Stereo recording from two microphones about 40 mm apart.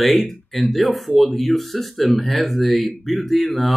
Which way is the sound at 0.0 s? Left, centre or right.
Centre.